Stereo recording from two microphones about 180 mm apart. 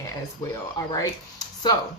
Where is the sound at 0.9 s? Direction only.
20° left (ahead or behind).